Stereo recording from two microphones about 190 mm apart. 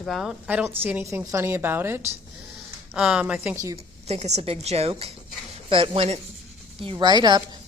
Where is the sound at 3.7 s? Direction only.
35° right (ahead or behind).